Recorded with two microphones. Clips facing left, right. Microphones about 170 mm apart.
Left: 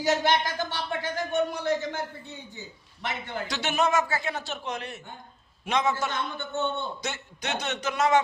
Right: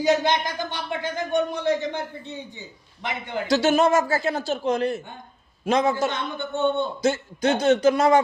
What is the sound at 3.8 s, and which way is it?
A man's voice, 30° right (ahead or behind).